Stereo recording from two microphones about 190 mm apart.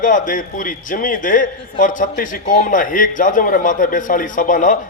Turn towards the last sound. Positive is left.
turn(degrees=45)  # may be behind; listen again after turning